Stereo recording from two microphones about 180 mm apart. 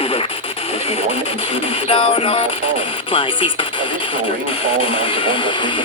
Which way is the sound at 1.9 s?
30° left (ahead or behind).